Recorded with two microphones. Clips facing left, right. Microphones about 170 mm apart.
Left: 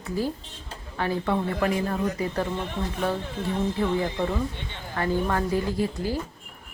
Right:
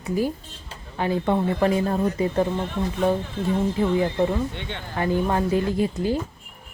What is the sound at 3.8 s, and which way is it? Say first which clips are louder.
A woman's voice: right 5 dB; 15° right (ahead or behind).